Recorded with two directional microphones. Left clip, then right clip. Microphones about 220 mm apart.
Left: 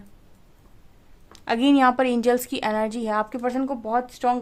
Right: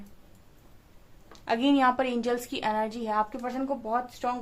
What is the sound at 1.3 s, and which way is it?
A woman's voice, 45° left (ahead or behind).